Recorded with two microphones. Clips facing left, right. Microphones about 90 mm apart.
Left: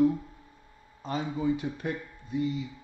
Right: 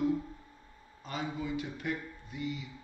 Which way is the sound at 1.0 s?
35° left (ahead or behind).